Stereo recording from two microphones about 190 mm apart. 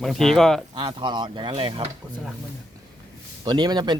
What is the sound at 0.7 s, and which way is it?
Speech, 25° right (ahead or behind).